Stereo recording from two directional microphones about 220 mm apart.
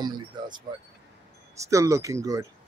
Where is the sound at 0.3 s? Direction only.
20° right (ahead or behind).